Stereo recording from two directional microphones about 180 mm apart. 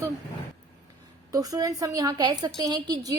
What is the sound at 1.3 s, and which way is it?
A woman's voice, 20° right (ahead or behind).